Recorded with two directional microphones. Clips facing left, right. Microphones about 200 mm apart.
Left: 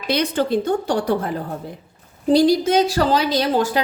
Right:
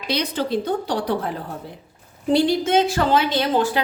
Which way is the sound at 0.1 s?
50° left (ahead or behind).